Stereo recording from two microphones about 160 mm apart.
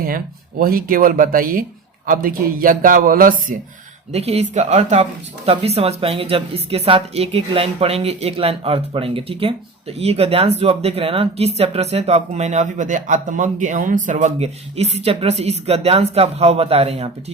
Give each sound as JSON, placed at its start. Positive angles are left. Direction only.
{"t": 0.6, "sound": "speech", "side_deg": -65}
{"t": 4.1, "sound": "speech", "side_deg": -40}